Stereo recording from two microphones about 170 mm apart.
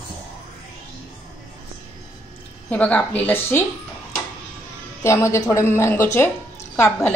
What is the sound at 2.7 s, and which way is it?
Speech, 10° left (ahead or behind).